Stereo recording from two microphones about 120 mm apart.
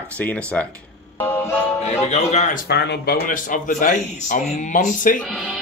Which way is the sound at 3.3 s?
90° left.